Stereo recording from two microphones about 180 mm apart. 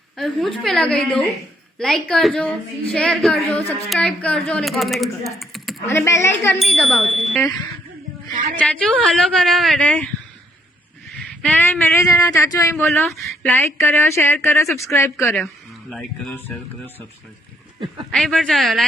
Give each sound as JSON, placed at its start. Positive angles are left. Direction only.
{"t": 0.2, "sound": "speech", "side_deg": 0}
{"t": 5.8, "sound": "speech", "side_deg": 15}
{"t": 6.6, "sound": "speech", "side_deg": 0}
{"t": 8.5, "sound": "speech", "side_deg": 5}
{"t": 11.4, "sound": "speech", "side_deg": 10}
{"t": 18.1, "sound": "speech", "side_deg": 5}